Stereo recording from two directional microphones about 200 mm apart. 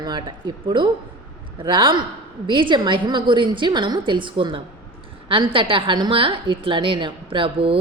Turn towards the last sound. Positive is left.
turn(degrees=-25)  # may be behind; listen again after turning